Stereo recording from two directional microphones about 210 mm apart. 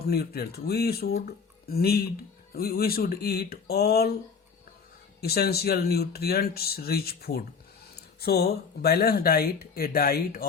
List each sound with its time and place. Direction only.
0.0 s speech: 50° left (ahead or behind)
5.2 s speech: 50° left (ahead or behind)